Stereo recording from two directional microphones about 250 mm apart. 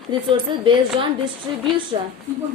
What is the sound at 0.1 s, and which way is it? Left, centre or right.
Speech, centre.